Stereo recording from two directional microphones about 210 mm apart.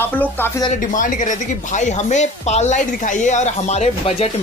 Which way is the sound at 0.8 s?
40° left (ahead or behind).